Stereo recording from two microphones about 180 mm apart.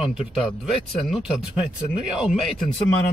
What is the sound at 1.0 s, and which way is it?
Speech, 5° right (ahead or behind).